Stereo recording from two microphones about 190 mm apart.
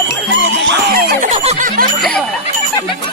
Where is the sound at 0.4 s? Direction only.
70° right (ahead or behind).